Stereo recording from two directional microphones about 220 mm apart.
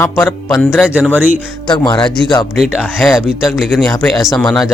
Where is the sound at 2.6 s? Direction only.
Centre (ahead or behind).